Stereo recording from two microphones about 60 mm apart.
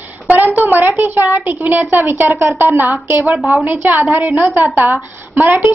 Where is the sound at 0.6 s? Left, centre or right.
Right.